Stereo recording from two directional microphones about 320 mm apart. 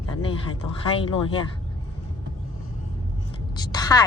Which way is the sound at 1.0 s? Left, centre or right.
Centre.